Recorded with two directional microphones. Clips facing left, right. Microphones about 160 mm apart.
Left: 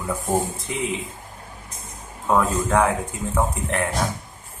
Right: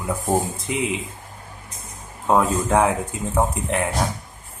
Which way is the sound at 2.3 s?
20° right (ahead or behind).